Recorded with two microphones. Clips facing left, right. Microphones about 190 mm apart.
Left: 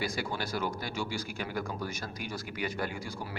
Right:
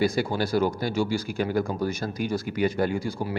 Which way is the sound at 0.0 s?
30° right (ahead or behind).